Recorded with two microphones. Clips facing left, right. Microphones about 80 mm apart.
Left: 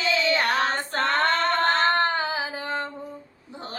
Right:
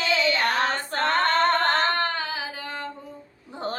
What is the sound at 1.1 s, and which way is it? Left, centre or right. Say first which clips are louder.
Female singing: right 2 dB; right.